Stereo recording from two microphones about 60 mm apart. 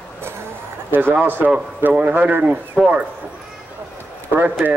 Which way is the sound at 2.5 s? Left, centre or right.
Centre.